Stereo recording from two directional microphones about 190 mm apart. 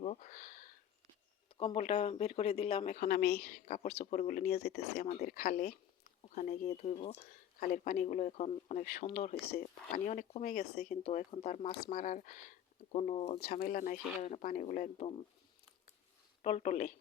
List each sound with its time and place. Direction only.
0.0 s a sound: 40° left (ahead or behind)
1.5 s speech: 30° left (ahead or behind); by 3.8 s 50° left (ahead or behind)
3.9 s speech: 35° left (ahead or behind)
6.2 s a sound: 35° left (ahead or behind)
6.6 s speech: 35° left (ahead or behind)
10.4 s speech: 55° left (ahead or behind)
10.8 s speech: 35° left (ahead or behind)
13.5 s speech: 45° left (ahead or behind)
16.4 s speech: 35° left (ahead or behind)